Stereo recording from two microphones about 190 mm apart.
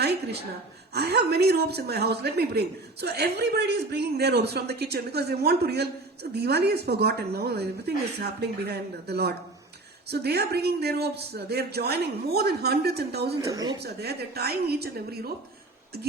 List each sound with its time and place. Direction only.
0.0 s a sound: 60° right (ahead or behind)
0.9 s speech: 60° right (ahead or behind)
13.4 s speech: 20° right (ahead or behind)
13.8 s speech: 60° right (ahead or behind)